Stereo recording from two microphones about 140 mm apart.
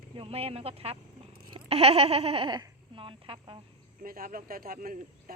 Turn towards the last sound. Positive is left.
turn(degrees=-90)